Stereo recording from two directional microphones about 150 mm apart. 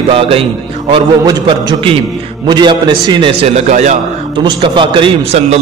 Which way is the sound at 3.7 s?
50° right (ahead or behind).